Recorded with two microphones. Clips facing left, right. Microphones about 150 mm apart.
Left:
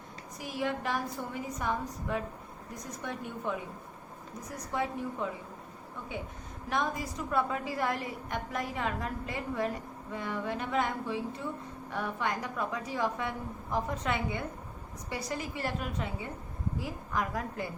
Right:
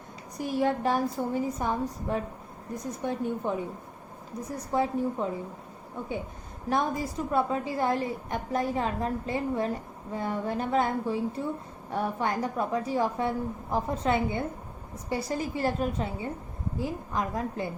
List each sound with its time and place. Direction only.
0.6 s a woman's voice: 35° right (ahead or behind)
6.7 s a woman's voice: 35° right (ahead or behind)